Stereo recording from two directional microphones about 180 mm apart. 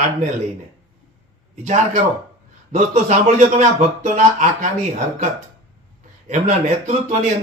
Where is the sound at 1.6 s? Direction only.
40° right (ahead or behind).